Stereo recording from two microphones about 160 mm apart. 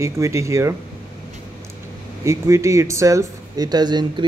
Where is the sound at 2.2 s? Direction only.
15° right (ahead or behind).